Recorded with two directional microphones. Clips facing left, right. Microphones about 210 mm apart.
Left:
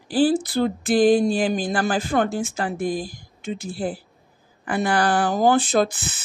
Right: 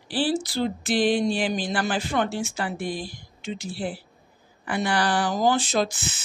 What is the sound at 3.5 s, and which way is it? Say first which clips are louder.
Speech: left 3 dB; 45° left (ahead or behind).